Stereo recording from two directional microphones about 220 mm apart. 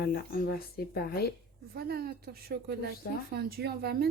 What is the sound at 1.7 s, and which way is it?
A woman's voice, 45° right (ahead or behind).